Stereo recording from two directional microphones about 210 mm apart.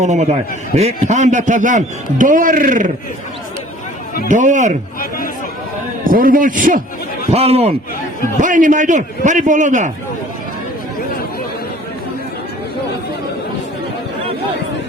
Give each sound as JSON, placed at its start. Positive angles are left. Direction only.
{"t": 0.0, "sound": "a man's voice", "side_deg": -35}
{"t": 4.3, "sound": "a man's voice", "side_deg": -35}
{"t": 6.1, "sound": "a man's voice", "side_deg": -40}
{"t": 7.3, "sound": "a man's voice", "side_deg": -30}